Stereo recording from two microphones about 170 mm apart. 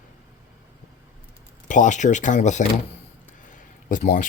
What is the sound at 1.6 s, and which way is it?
Speech, 45° left (ahead or behind).